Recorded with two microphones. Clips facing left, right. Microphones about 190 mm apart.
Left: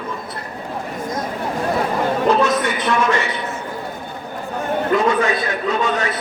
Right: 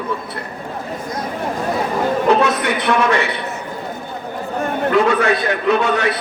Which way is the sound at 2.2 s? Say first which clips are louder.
Right 1 dB; 65° right (ahead or behind).